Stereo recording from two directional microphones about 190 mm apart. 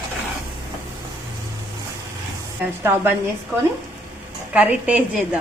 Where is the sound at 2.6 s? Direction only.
10° right (ahead or behind).